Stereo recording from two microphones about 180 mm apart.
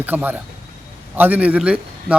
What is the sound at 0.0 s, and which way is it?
A man's voice, 10° right (ahead or behind).